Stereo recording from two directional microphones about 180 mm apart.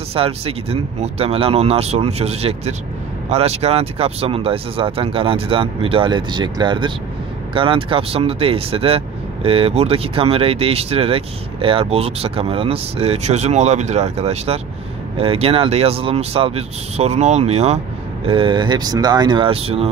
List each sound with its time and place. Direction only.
0.1 s speech: 35° right (ahead or behind)